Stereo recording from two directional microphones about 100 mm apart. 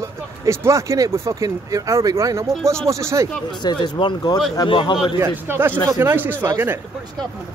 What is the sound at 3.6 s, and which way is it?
Speech, 45° left (ahead or behind).